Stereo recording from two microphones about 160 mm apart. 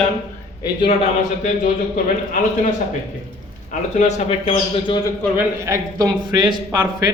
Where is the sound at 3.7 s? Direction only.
45° left (ahead or behind).